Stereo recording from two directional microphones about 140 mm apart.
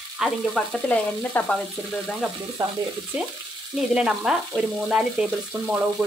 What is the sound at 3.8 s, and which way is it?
Frying, 5° right (ahead or behind).